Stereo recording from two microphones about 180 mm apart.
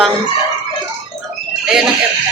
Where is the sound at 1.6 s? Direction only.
Centre (ahead or behind).